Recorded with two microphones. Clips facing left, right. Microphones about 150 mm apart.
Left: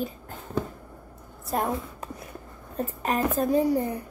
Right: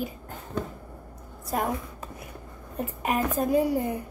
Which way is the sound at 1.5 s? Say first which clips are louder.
Left 1 dB; centre (ahead or behind).